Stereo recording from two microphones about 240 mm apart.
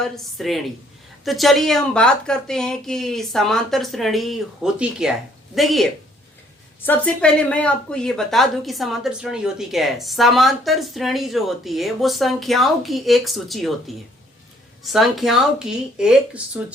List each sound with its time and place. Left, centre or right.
0.0 s a woman's voice: centre
14.9 s a woman's voice: centre